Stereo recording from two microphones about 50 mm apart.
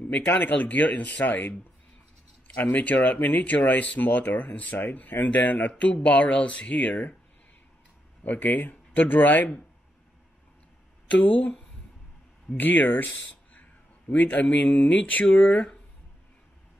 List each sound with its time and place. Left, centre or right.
0.1 s speech: left
5.7 s speech: left
8.2 s speech: left
11.1 s speech: left
15.2 s speech: centre